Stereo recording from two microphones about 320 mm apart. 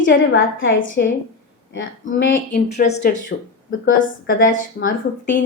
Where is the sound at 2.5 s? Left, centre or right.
Left.